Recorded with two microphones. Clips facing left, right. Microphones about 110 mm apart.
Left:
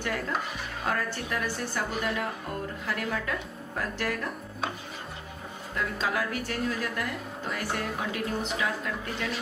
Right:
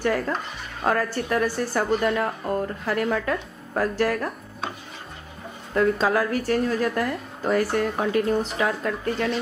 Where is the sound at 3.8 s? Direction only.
45° right (ahead or behind).